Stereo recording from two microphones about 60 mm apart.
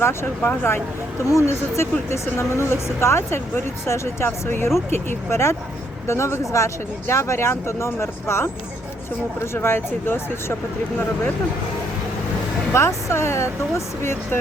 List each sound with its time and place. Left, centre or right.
0.0 s speech: left
1.2 s speech: left
12.7 s speech: left